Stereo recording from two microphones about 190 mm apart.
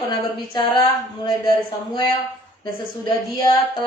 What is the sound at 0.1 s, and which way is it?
Child singing, 25° left (ahead or behind).